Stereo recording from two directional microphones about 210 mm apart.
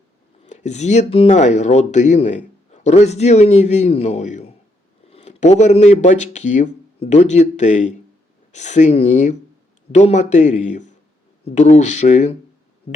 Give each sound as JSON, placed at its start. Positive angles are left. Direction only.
{"t": 0.4, "sound": "speech", "side_deg": 35}